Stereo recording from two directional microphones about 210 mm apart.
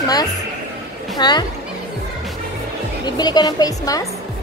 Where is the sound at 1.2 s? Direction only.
20° left (ahead or behind).